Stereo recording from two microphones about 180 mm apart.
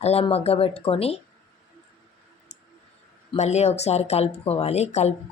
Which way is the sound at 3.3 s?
40° left (ahead or behind).